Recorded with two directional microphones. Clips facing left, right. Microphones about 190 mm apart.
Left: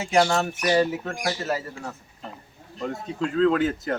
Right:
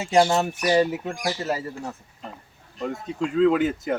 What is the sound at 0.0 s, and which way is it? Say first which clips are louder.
Speech: right 2 dB; 20° right (ahead or behind).